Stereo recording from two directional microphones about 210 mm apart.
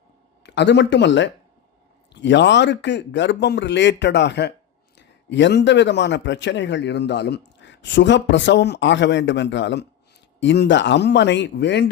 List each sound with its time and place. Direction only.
0.4 s a man's voice: 55° left (ahead or behind)